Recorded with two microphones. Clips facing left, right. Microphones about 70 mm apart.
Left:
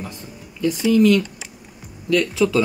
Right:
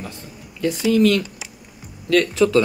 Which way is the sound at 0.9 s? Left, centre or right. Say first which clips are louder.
Left 2 dB; right.